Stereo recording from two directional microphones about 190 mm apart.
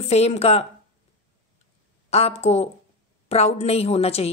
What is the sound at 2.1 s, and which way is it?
A woman's voice, 35° left (ahead or behind).